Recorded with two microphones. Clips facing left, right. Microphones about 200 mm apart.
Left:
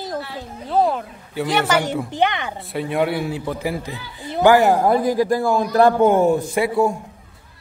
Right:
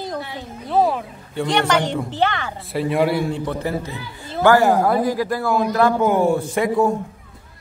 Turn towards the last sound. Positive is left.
turn(degrees=10)  # may be behind; listen again after turning